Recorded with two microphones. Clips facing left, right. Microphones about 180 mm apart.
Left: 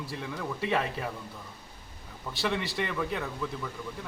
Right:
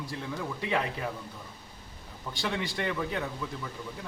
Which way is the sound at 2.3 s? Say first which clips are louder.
Left 2 dB; centre (ahead or behind).